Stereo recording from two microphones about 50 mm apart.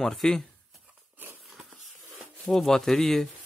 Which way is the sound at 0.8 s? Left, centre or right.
Right.